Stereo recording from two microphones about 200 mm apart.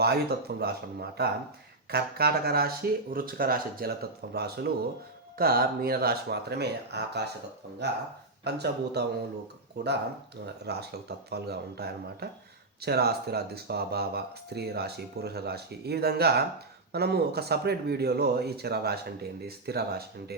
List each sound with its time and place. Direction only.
0.0 s speech: 55° right (ahead or behind)